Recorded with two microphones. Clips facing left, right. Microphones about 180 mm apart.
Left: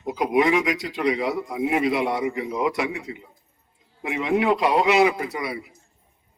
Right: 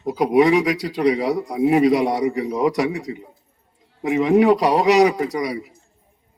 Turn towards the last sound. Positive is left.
turn(degrees=-40)  # may be behind; listen again after turning